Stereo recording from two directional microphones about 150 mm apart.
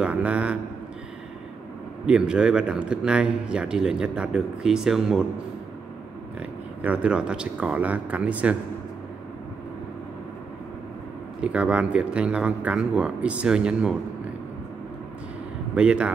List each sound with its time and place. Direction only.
0.0 s speech: 10° right (ahead or behind)
2.0 s a man's voice: 5° right (ahead or behind)
6.8 s speech: 10° right (ahead or behind)
11.4 s speech: 10° right (ahead or behind)
15.7 s speech: 5° right (ahead or behind)